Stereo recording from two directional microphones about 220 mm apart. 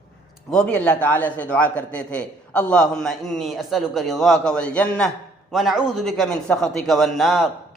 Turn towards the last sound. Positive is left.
turn(degrees=0)  # may be behind; listen again after turning